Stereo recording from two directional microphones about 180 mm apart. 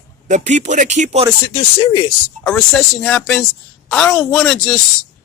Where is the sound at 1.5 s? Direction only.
25° left (ahead or behind).